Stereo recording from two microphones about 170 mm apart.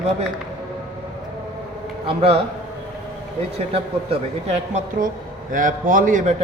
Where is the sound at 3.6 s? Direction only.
35° right (ahead or behind).